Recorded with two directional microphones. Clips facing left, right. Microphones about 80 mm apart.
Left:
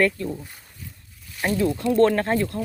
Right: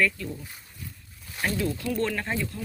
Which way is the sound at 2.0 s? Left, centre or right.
Left.